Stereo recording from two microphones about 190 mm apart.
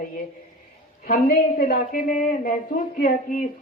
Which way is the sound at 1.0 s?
50° left (ahead or behind).